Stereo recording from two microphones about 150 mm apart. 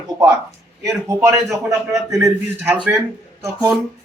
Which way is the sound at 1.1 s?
20° right (ahead or behind).